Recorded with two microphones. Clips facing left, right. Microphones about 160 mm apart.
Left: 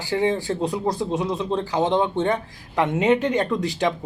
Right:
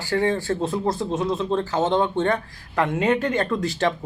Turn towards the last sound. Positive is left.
turn(degrees=15)  # may be behind; listen again after turning